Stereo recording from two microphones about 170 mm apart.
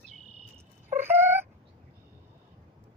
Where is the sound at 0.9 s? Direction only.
15° right (ahead or behind).